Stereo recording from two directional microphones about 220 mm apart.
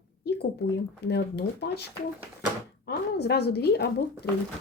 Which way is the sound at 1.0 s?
45° left (ahead or behind).